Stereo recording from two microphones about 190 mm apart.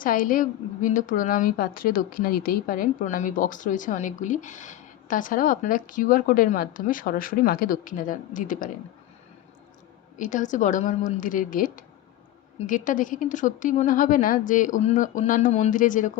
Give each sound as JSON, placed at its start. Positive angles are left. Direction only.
{"t": 0.0, "sound": "a woman's voice", "side_deg": 45}
{"t": 10.2, "sound": "a woman's voice", "side_deg": 40}